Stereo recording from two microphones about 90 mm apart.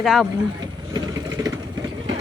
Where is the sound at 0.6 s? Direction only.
45° right (ahead or behind).